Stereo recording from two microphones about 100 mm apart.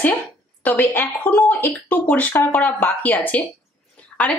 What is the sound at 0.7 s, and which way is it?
Speech, 20° left (ahead or behind).